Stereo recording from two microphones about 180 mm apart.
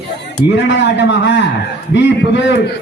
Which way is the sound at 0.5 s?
80° left.